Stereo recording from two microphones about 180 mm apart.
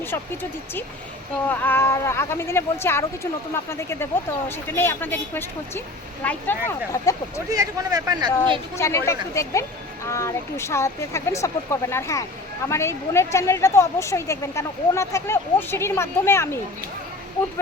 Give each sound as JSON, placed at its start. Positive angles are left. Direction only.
{"t": 1.5, "sound": "a woman's voice", "side_deg": 10}
{"t": 7.5, "sound": "speech", "side_deg": -20}
{"t": 8.7, "sound": "a woman's voice", "side_deg": 15}